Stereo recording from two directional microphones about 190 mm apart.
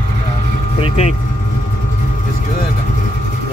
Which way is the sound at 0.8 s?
35° left (ahead or behind).